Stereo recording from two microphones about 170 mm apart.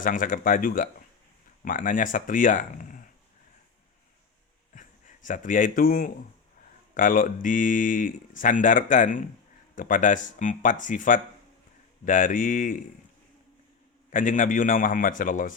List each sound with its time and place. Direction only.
0.0 s speech: 50° left (ahead or behind)
4.7 s a sound: 50° left (ahead or behind)
6.9 s speech: 50° left (ahead or behind)
14.1 s speech: 50° left (ahead or behind)